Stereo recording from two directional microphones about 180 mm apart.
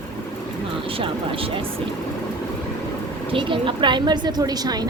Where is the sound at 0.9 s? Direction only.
30° right (ahead or behind).